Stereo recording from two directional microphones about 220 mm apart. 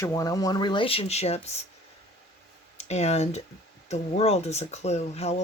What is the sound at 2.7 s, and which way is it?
Speech, 30° left (ahead or behind).